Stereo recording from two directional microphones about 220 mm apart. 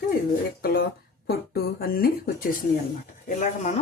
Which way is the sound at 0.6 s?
45° left (ahead or behind).